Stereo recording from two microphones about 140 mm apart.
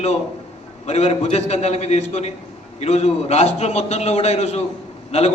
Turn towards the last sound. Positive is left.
turn(degrees=50)  # may be behind; listen again after turning